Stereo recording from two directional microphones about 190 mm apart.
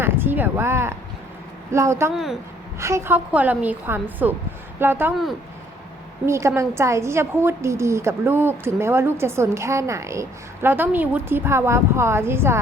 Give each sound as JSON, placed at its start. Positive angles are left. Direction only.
{"t": 0.0, "sound": "a woman's voice", "side_deg": -10}
{"t": 6.2, "sound": "a woman's voice", "side_deg": -15}